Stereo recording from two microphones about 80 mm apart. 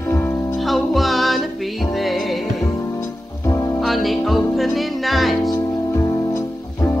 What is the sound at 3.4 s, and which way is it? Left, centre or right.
Music, left.